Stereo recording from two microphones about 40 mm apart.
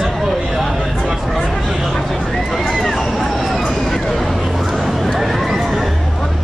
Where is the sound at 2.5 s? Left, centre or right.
Centre.